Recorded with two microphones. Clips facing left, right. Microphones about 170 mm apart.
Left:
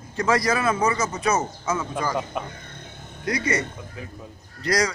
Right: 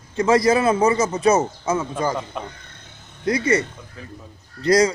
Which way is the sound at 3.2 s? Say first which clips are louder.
Right 5 dB; 25° right (ahead or behind).